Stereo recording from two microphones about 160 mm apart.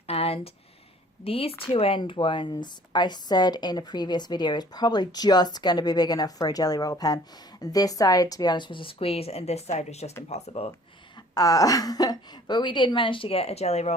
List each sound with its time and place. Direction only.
0.1 s a sound: 40° left (ahead or behind)
1.2 s a woman's voice: 35° left (ahead or behind)
11.3 s speech: 20° left (ahead or behind); by 13.9 s 45° left (ahead or behind)